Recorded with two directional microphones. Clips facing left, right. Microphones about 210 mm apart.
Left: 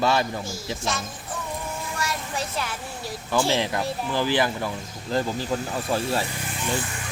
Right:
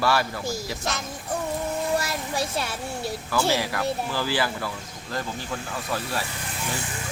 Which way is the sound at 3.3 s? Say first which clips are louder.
Left 2 dB; 25° left (ahead or behind).